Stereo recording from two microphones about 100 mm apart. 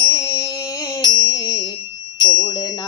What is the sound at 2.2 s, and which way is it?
Bell, 45° left (ahead or behind).